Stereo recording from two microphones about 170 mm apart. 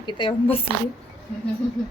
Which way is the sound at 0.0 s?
30° left (ahead or behind).